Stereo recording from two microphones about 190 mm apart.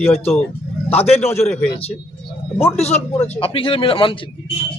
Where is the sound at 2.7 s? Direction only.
35° left (ahead or behind).